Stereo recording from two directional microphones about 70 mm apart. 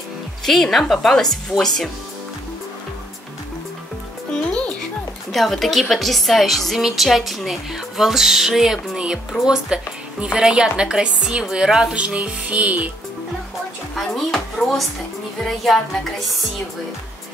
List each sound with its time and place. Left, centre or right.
0.5 s a woman's voice: centre
4.5 s music: centre
5.3 s a woman's voice: centre
13.9 s a woman's voice: centre